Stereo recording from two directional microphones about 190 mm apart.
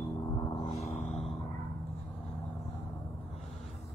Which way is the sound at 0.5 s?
25° left (ahead or behind).